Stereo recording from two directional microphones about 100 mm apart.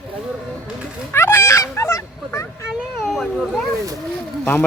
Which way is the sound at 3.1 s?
Centre (ahead or behind).